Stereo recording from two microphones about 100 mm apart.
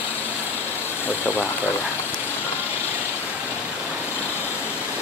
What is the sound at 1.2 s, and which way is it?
Speech, 20° left (ahead or behind).